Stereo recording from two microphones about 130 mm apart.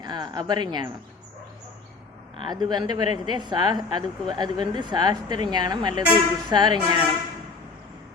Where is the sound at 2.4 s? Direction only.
35° right (ahead or behind).